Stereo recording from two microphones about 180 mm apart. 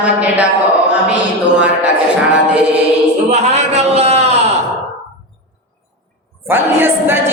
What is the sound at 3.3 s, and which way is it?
A man's voice, 40° right (ahead or behind).